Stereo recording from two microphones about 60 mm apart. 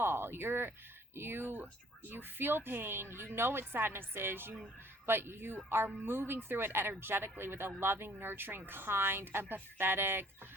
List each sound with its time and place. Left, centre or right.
0.0 s speech: right